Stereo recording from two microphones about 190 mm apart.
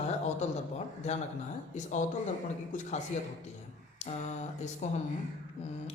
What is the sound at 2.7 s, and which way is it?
Speech, 40° left (ahead or behind).